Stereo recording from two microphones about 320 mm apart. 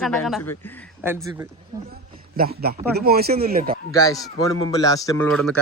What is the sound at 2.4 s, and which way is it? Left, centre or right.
A man's voice, right.